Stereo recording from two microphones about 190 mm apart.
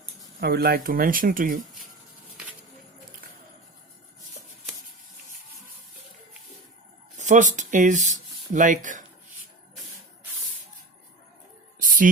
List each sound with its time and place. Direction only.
0.3 s speech: 55° right (ahead or behind)
7.2 s speech: 40° right (ahead or behind)
11.8 s a sound: 45° right (ahead or behind)